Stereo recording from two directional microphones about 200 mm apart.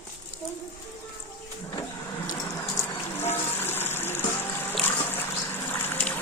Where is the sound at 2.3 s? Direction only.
15° left (ahead or behind).